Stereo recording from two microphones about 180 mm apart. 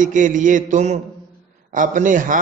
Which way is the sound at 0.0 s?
45° right (ahead or behind).